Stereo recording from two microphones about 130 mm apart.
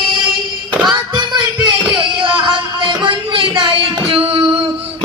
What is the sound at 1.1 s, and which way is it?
Music, 35° right (ahead or behind).